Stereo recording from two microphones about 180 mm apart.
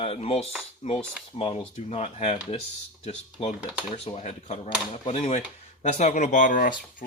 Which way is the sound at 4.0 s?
35° left (ahead or behind).